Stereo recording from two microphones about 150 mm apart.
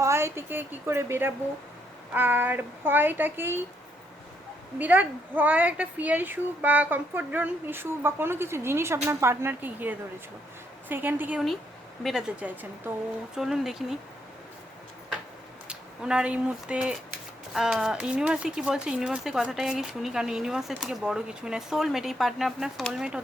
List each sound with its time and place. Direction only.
0.0 s speech: 20° right (ahead or behind)
4.8 s speech: 10° right (ahead or behind)
15.6 s speech: 5° right (ahead or behind)